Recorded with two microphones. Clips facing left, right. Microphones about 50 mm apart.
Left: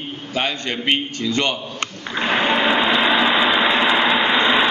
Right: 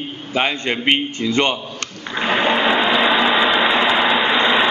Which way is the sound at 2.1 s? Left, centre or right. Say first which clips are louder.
Right 1 dB; centre.